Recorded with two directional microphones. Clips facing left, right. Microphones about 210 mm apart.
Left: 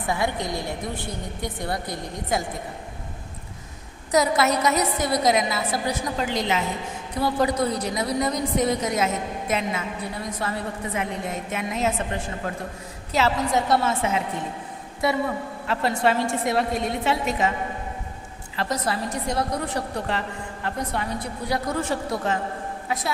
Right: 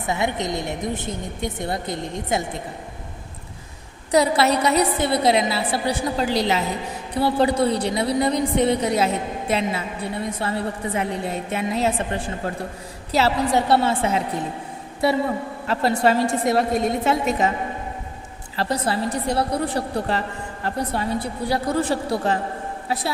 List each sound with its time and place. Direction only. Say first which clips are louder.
0.0 s a woman's voice: right 2 dB; 20° right (ahead or behind)
4.1 s a woman's voice: right 3 dB; 30° right (ahead or behind)
15.6 s a woman's voice: right 3 dB; 40° right (ahead or behind)
18.5 s a woman's voice: right 3 dB; 30° right (ahead or behind)